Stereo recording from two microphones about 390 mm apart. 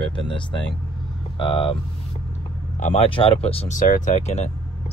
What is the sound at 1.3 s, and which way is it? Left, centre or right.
Speech, centre.